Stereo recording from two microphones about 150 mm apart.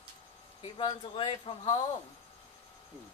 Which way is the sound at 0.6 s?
35° left (ahead or behind).